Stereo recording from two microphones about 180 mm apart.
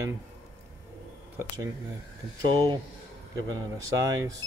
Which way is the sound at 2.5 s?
25° right (ahead or behind).